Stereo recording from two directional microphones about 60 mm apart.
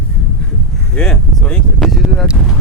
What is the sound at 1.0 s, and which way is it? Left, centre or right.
Speech, centre.